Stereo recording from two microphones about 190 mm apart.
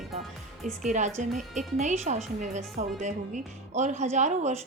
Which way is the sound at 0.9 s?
40° right (ahead or behind).